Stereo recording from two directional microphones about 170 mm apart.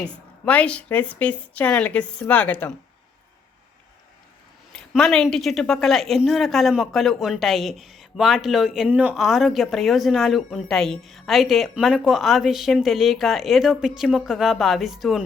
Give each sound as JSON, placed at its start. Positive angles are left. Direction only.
{"t": 0.0, "sound": "a woman's voice", "side_deg": 10}
{"t": 4.7, "sound": "a woman's voice", "side_deg": 5}